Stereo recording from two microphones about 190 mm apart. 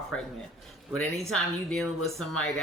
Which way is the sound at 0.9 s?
5° left (ahead or behind).